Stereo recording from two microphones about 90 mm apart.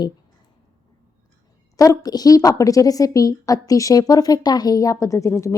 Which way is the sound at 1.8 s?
40° left (ahead or behind).